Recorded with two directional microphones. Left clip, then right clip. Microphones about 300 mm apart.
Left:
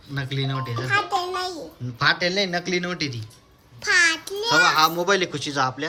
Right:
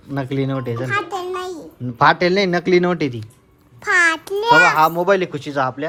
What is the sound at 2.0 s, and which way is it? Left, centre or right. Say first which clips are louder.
A child's voice: right 7 dB; centre.